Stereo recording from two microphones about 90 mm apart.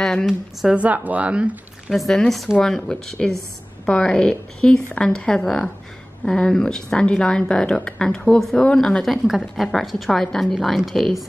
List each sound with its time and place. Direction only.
0.0 s a woman's voice: 5° left (ahead or behind)
0.7 s speech: 15° right (ahead or behind)
1.9 s a woman's voice: 5° left (ahead or behind)